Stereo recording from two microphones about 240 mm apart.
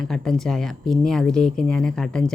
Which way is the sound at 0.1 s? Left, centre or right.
Centre.